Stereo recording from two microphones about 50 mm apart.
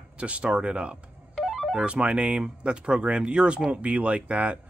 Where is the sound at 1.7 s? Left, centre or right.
Right.